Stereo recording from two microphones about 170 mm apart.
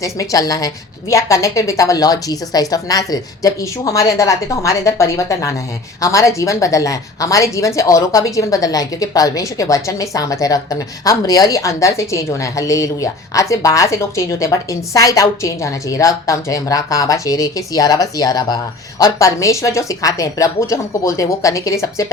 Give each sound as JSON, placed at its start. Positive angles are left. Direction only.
{"t": 0.0, "sound": "a woman's voice", "side_deg": 20}